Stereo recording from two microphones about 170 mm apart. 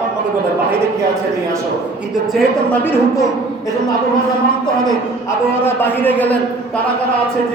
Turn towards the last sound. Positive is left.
turn(degrees=10)  # may be behind; listen again after turning